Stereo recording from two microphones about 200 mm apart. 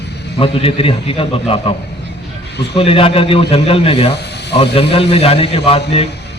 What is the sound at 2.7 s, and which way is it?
A man's voice, 25° left (ahead or behind).